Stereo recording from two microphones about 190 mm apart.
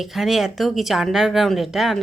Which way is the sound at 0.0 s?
Centre (ahead or behind).